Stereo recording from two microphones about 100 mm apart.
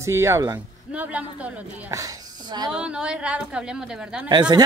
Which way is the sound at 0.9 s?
15° right (ahead or behind).